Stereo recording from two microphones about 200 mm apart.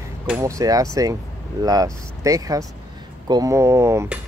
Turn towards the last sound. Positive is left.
turn(degrees=-15)  # may be behind; listen again after turning